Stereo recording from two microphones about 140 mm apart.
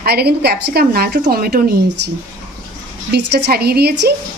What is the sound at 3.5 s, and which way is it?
Speech, 90° right.